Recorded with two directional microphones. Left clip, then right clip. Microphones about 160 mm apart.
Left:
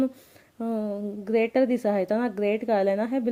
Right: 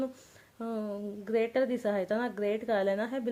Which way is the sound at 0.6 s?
35° left (ahead or behind).